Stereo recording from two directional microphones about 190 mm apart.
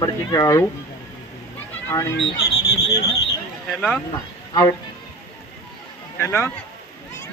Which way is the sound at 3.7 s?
Centre (ahead or behind).